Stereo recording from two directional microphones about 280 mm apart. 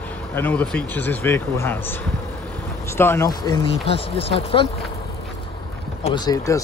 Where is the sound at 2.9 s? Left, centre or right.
Centre.